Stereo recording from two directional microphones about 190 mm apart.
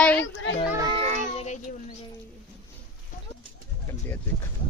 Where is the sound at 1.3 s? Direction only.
35° left (ahead or behind).